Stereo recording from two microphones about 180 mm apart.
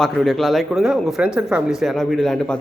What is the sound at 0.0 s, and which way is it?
Speech, centre (ahead or behind).